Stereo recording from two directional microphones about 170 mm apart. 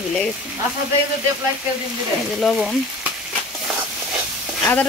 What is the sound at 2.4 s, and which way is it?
Speech, centre (ahead or behind).